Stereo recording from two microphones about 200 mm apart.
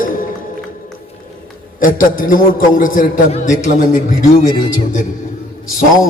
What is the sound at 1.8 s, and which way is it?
A man's voice, 40° left (ahead or behind).